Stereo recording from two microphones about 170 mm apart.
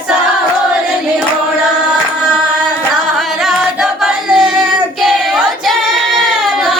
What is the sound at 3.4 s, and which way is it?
Singing, centre (ahead or behind).